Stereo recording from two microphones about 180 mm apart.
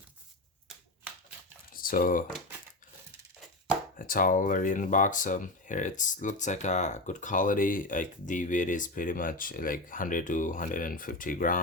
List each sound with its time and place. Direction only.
1.7 s computer keyboard: 50° left (ahead or behind)
3.9 s speech: 50° left (ahead or behind)